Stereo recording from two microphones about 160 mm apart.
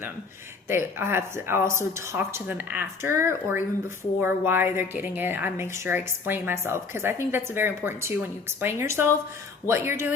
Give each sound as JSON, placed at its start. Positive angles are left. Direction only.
{"t": 0.7, "sound": "speech", "side_deg": -15}